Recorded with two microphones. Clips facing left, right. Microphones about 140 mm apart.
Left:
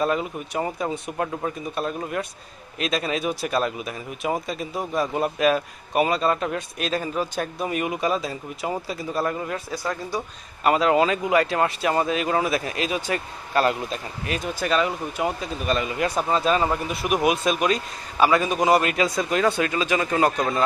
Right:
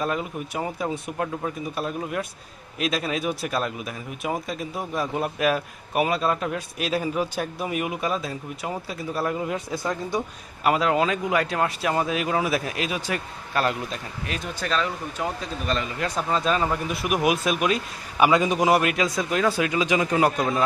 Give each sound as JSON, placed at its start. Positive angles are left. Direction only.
{"t": 0.0, "sound": "speech", "side_deg": 0}
{"t": 9.4, "sound": "speech", "side_deg": -15}
{"t": 10.6, "sound": "speech", "side_deg": 0}
{"t": 18.2, "sound": "speech", "side_deg": -15}
{"t": 18.7, "sound": "speech", "side_deg": -5}